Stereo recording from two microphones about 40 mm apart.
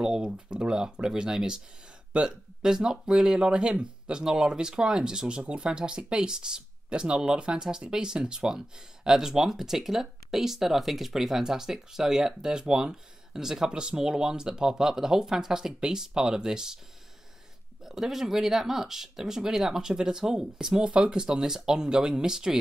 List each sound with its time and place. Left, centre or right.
0.0 s speech: right
17.8 s speech: centre